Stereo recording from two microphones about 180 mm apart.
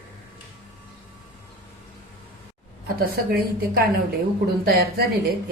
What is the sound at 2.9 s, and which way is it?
A woman's voice, 60° right (ahead or behind).